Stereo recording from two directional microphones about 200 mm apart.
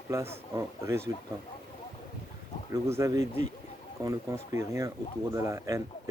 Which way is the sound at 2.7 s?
15° right (ahead or behind).